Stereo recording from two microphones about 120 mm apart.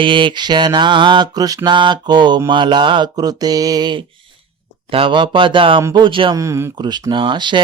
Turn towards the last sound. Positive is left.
turn(degrees=-40)  # may be behind; listen again after turning